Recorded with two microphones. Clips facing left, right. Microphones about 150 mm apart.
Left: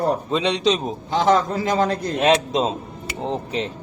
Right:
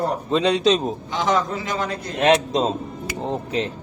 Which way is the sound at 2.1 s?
Centre (ahead or behind).